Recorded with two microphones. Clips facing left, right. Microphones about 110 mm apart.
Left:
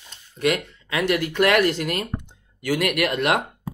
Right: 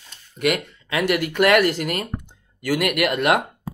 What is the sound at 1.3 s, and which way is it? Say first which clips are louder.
Speech: right 3 dB; 60° right (ahead or behind).